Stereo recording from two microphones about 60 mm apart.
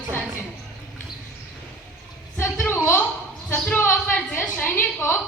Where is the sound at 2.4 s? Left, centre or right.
Left.